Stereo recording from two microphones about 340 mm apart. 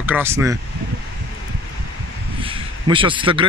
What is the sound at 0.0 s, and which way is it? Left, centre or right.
Speech, centre.